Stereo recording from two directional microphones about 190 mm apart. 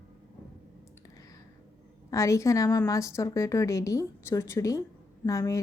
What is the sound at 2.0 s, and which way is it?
A woman's voice, 15° left (ahead or behind).